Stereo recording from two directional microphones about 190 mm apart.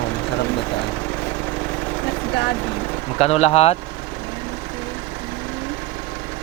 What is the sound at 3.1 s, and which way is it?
Speech, 35° left (ahead or behind).